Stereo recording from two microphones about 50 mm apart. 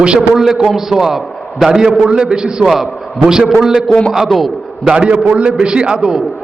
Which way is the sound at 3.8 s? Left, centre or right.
Centre.